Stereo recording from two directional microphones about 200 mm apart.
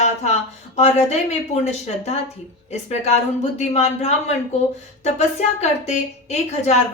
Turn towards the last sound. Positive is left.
turn(degrees=35)  # may be behind; listen again after turning